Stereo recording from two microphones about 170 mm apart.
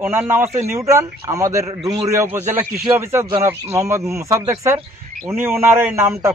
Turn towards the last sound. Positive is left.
turn(degrees=-15)  # may be behind; listen again after turning